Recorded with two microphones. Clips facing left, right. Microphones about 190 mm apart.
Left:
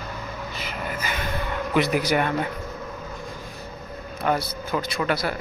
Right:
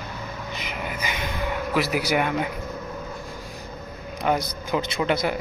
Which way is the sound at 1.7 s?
5° right (ahead or behind).